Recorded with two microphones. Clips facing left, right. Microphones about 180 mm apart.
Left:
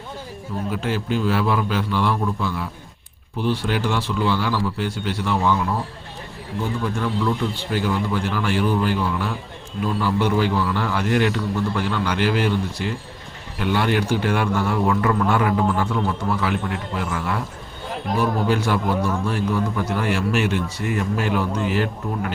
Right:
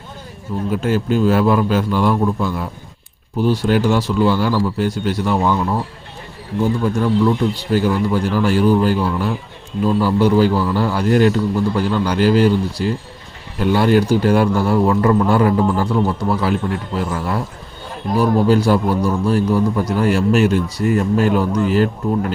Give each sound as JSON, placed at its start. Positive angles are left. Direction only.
{"t": 0.7, "sound": "a man's voice", "side_deg": -45}
{"t": 6.8, "sound": "a man's voice", "side_deg": -35}